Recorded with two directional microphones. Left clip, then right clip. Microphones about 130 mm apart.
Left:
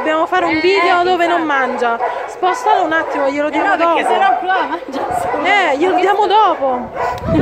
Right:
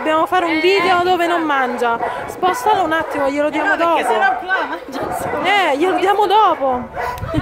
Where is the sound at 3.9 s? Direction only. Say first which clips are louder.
Left 2 dB; 70° right (ahead or behind).